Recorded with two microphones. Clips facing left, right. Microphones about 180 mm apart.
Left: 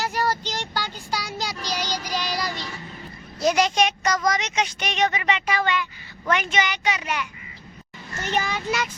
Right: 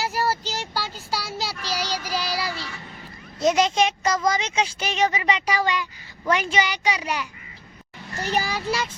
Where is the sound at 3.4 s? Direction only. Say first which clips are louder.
Right 1 dB; 25° right (ahead or behind).